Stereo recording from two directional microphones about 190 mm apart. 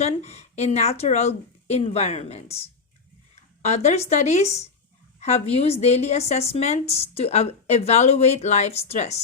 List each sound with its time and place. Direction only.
0.0 s a woman's voice: 35° left (ahead or behind)
3.6 s a woman's voice: 35° left (ahead or behind)